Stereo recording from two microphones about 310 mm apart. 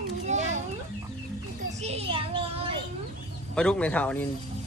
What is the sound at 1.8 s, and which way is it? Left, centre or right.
Child singing, centre.